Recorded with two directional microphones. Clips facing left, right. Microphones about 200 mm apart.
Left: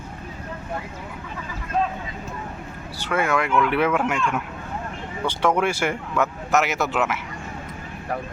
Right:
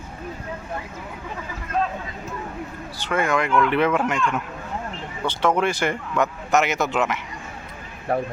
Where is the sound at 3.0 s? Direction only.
10° left (ahead or behind).